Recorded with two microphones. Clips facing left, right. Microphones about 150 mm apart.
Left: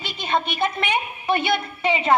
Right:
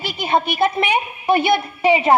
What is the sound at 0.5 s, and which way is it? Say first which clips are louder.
A woman's voice: right 5 dB; 40° right (ahead or behind).